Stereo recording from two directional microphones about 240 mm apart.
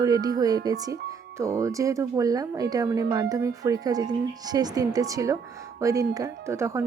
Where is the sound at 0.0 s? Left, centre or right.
Centre.